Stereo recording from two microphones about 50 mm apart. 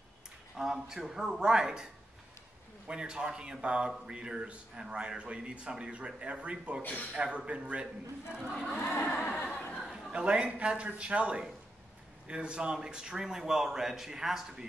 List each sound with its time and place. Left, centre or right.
0.6 s a man's voice: centre
2.9 s a man's voice: centre
6.8 s a sound: left
7.2 s a man's voice: right
8.6 s a sound: left
9.3 s chuckle: left
10.1 s a man's voice: right